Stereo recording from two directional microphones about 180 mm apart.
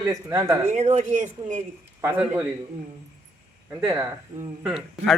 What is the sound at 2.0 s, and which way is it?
Speech, 10° right (ahead or behind).